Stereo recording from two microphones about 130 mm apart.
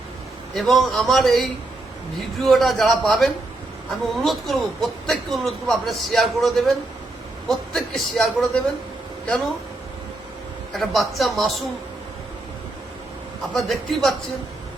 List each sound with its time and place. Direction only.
0.5 s speech: centre (ahead or behind)
10.7 s speech: centre (ahead or behind)
13.5 s speech: centre (ahead or behind)